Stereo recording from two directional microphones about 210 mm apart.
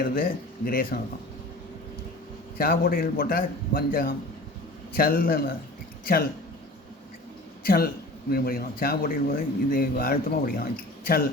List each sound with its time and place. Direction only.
0.0 s a man's voice: 45° left (ahead or behind)
2.6 s a man's voice: 45° left (ahead or behind)
7.6 s a man's voice: 45° left (ahead or behind)